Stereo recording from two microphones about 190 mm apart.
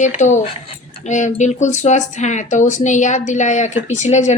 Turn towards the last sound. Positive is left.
turn(degrees=35)  # may be behind; listen again after turning